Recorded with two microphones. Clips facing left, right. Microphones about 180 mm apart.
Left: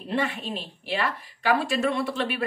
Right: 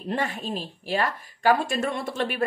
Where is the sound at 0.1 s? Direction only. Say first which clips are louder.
Left 1 dB; 40° right (ahead or behind).